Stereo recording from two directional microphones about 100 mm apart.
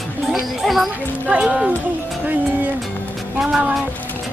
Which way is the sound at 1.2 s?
15° right (ahead or behind).